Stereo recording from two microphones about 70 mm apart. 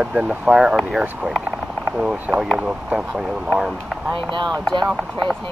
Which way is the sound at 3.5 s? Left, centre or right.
Centre.